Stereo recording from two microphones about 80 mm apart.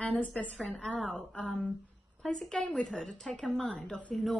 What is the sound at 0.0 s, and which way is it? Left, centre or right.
A woman's voice, centre.